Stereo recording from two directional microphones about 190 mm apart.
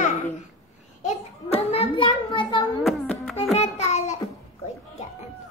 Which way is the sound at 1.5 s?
30° left (ahead or behind).